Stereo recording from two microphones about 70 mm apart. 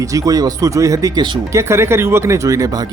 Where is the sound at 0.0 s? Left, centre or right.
Right.